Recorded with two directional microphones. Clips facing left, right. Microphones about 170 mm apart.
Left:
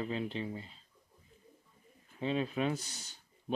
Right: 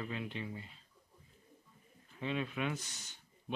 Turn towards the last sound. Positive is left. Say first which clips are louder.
# left 5 dB
turn(degrees=35)  # may be behind; listen again after turning